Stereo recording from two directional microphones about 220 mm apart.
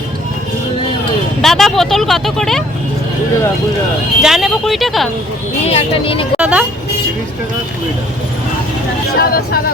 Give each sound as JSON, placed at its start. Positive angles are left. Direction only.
{"t": 1.4, "sound": "speech", "side_deg": 0}
{"t": 4.2, "sound": "speech", "side_deg": 0}
{"t": 5.6, "sound": "speech", "side_deg": 25}
{"t": 6.4, "sound": "speech", "side_deg": -5}
{"t": 9.0, "sound": "speech", "side_deg": 45}